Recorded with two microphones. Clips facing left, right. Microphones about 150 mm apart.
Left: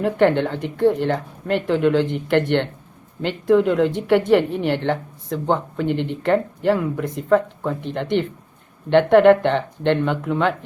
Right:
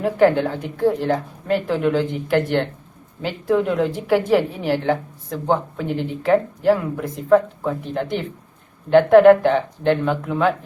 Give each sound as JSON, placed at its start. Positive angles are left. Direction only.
{"t": 0.0, "sound": "speech", "side_deg": 0}